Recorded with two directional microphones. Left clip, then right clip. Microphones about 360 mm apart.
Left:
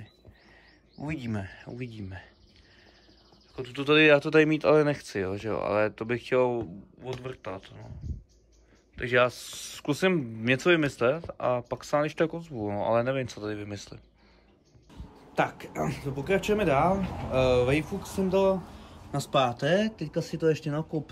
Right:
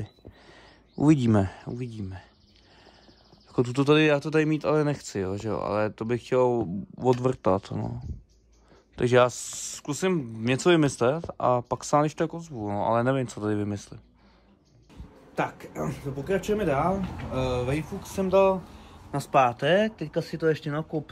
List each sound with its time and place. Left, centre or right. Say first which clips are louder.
0.5 s speech: right 4 dB; centre
3.5 s speech: right 2 dB; centre
8.9 s speech: right 3 dB; centre